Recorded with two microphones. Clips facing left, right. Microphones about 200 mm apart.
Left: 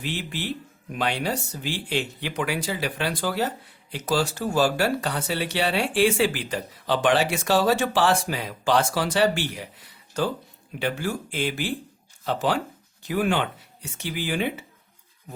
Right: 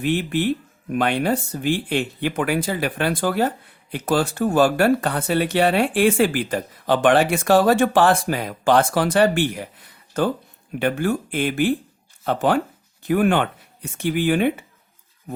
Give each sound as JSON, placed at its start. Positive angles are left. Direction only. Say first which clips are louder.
{"t": 0.0, "sound": "speech", "louder": "right 10 dB", "side_deg": -55}